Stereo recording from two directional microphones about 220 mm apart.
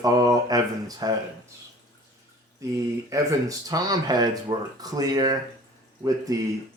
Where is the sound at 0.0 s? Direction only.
15° right (ahead or behind).